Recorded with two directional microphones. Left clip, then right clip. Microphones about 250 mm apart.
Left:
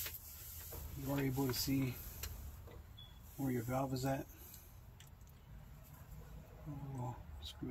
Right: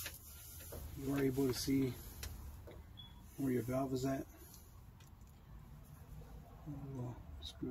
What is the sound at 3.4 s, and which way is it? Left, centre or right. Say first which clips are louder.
Speech: right 1 dB; centre.